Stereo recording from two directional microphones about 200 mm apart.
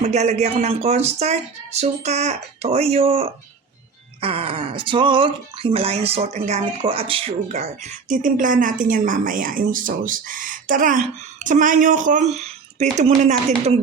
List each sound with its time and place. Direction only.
0.0 s speech: 35° right (ahead or behind)